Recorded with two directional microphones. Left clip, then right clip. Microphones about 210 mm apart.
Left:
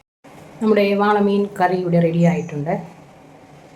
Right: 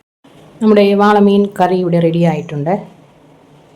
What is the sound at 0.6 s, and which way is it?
A woman's voice, 30° right (ahead or behind).